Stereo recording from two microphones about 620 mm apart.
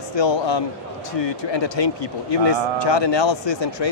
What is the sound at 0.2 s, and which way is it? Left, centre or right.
Speech, left.